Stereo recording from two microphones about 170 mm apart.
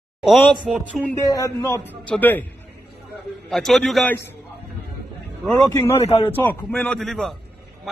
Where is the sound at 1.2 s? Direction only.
20° left (ahead or behind).